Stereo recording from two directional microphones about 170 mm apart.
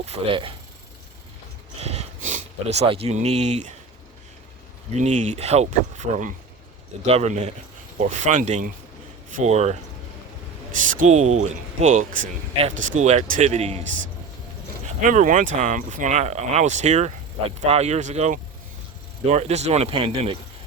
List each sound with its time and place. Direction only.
0.0 s speech: 35° right (ahead or behind)
1.8 s a sound: 40° right (ahead or behind)
4.9 s speech: 45° right (ahead or behind)
10.9 s speech: 45° right (ahead or behind)
14.8 s speech: 50° right (ahead or behind)